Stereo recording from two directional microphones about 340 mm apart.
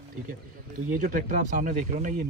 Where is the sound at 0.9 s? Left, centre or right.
Right.